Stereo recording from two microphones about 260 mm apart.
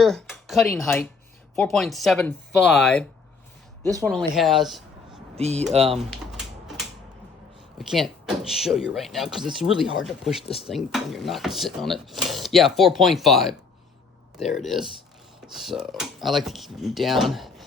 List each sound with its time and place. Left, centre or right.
0.0 s speech: centre
5.4 s speech: right
6.0 s typewriter: centre
7.8 s speech: centre
14.6 s speech: centre